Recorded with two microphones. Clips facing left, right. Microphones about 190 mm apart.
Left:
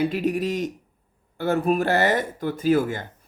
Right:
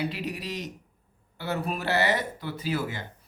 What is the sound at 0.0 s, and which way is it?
Speech, 50° left (ahead or behind).